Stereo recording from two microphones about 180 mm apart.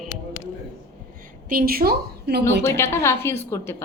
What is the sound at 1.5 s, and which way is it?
Speech, 55° right (ahead or behind).